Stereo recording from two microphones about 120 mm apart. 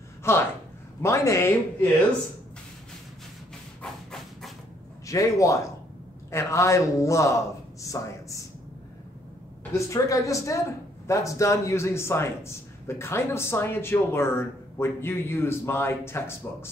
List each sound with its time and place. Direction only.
0.2 s a man's voice: 20° left (ahead or behind)
3.8 s steam: centre (ahead or behind)
5.0 s a man's voice: 25° left (ahead or behind)
9.8 s a man's voice: 25° left (ahead or behind)